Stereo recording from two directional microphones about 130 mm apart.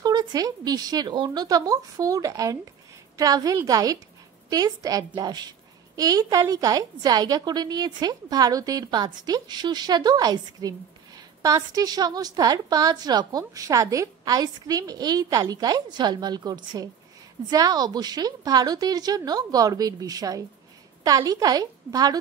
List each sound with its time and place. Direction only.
0.0 s a woman's voice: 30° right (ahead or behind)